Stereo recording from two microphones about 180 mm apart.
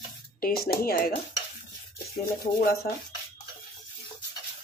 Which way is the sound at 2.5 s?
55° left (ahead or behind).